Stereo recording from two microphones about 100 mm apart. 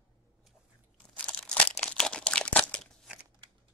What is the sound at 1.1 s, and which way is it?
Crumpling, 10° left (ahead or behind).